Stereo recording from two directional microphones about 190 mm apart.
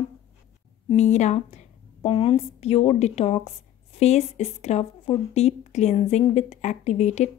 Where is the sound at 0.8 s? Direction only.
35° left (ahead or behind).